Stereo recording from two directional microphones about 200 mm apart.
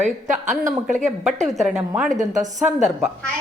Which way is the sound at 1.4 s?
Centre (ahead or behind).